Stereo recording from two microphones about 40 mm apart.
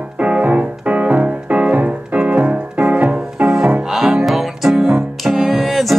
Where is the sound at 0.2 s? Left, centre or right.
Right.